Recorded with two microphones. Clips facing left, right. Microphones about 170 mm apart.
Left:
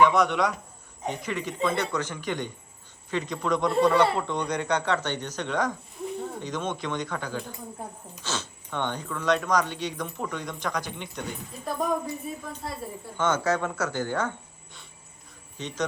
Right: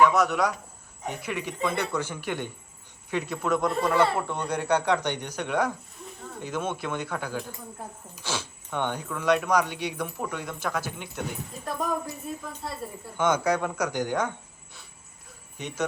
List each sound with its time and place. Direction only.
0.0 s a man's voice: centre (ahead or behind)
13.1 s speech: 10° right (ahead or behind)